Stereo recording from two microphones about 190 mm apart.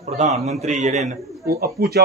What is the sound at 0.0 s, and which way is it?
A man's voice, 40° right (ahead or behind).